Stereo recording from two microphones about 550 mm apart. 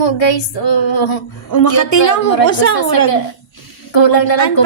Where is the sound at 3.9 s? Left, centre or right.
Left.